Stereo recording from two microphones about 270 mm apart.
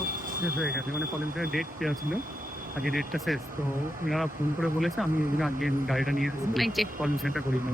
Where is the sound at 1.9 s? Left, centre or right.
Right.